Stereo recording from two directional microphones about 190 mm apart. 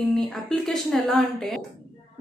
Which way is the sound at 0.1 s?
Centre (ahead or behind).